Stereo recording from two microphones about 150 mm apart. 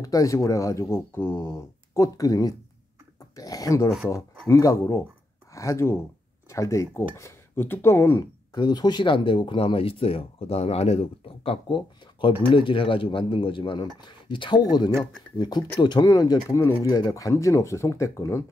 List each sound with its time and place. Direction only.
0.0 s speech: 20° left (ahead or behind)
8.5 s speech: 30° left (ahead or behind)